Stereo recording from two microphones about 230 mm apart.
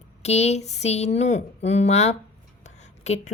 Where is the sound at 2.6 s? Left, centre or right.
Left.